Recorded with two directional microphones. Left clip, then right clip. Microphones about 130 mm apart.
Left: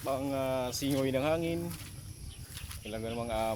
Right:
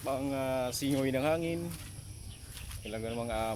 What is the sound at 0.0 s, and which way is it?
Speech, 25° right (ahead or behind).